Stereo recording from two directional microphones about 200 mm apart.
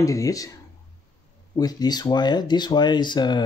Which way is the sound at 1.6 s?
20° left (ahead or behind).